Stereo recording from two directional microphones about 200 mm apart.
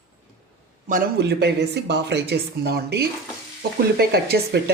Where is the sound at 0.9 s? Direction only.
55° right (ahead or behind).